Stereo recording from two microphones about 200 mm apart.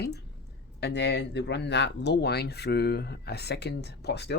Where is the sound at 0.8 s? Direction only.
55° left (ahead or behind).